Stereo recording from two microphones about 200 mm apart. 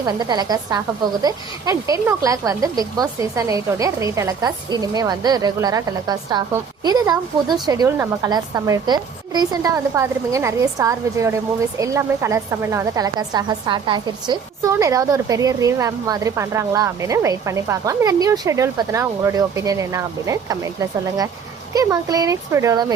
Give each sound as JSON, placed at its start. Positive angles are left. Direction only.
{"t": 0.0, "sound": "a woman's voice", "side_deg": -20}